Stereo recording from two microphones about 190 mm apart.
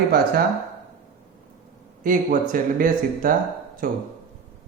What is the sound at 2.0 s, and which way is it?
Speech, 45° right (ahead or behind).